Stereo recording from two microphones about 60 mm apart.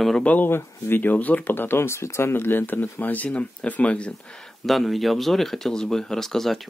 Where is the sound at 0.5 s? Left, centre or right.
Left.